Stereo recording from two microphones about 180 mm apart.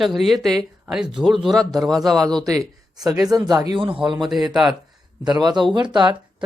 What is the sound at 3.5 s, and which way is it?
Speech, 20° right (ahead or behind).